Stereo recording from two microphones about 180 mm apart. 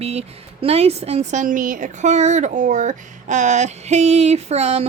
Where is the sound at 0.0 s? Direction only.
35° right (ahead or behind).